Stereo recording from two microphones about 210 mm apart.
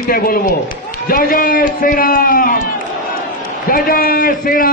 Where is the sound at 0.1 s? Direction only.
45° left (ahead or behind).